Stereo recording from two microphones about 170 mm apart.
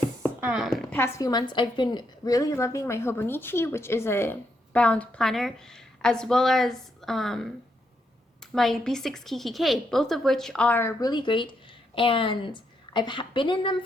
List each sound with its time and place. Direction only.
0.4 s a woman's voice: 5° right (ahead or behind)
0.7 s a woman's voice: 15° left (ahead or behind)
8.5 s a woman's voice: centre (ahead or behind)
11.1 s a woman's voice: 30° left (ahead or behind)